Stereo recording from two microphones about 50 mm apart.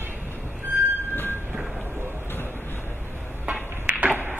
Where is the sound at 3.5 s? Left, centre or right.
Right.